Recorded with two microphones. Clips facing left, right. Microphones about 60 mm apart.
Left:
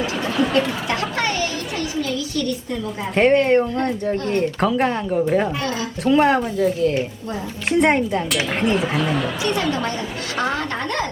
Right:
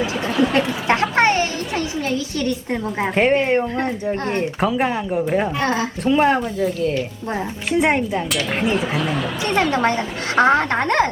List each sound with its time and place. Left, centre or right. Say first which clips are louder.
0.0 s a sound: right 2 dB; centre
1.1 s speech: right 5 dB; right
3.2 s speech: left 2 dB; centre
4.1 s speech: left 1 dB; right
4.6 s speech: right 2 dB; centre
9.6 s a woman's voice: right 4 dB; right